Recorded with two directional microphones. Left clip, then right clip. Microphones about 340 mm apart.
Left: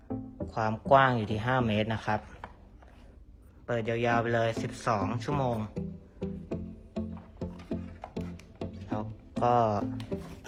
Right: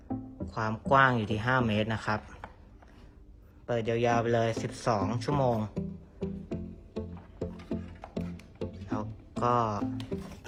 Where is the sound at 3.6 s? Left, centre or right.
Centre.